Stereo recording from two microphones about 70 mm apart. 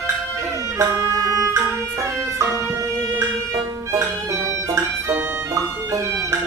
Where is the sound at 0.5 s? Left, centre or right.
Right.